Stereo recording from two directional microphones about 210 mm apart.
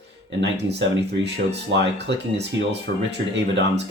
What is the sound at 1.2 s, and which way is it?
Speech, 55° right (ahead or behind).